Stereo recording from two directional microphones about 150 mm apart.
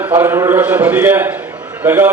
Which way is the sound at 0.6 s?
10° right (ahead or behind).